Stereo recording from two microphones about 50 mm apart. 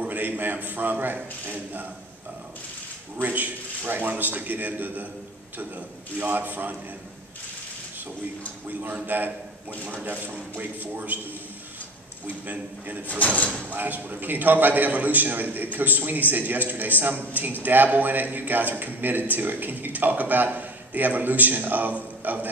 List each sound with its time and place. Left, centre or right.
0.0 s a man's voice: right
3.2 s a man's voice: right
9.0 s a man's voice: right
12.4 s a man's voice: right
13.0 s speech: left
13.7 s a man's voice: right